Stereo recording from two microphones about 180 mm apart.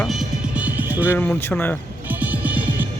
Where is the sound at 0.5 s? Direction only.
10° right (ahead or behind).